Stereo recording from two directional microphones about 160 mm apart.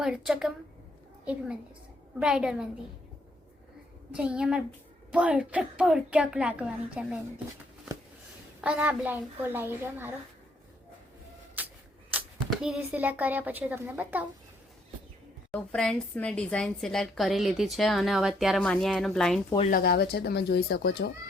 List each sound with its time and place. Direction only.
0.0 s a woman's voice: 5° right (ahead or behind)
4.1 s a woman's voice: 5° right (ahead or behind)
8.6 s a woman's voice: 10° right (ahead or behind)
11.6 s shuffling cards: 10° right (ahead or behind)
12.5 s a woman's voice: 5° right (ahead or behind)
15.5 s a woman's voice: 5° left (ahead or behind)
19.7 s speech: 85° left